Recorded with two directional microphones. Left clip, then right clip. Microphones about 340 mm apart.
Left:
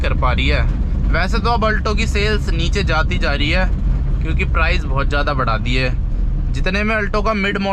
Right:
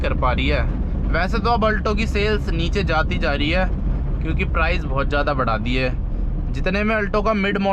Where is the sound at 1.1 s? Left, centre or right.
Centre.